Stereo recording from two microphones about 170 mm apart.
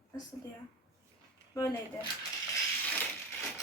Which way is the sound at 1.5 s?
20° left (ahead or behind).